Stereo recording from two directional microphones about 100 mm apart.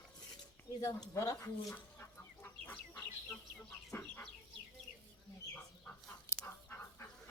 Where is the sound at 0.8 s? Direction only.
35° left (ahead or behind).